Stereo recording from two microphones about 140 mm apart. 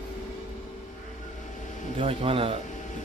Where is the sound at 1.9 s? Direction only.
40° right (ahead or behind).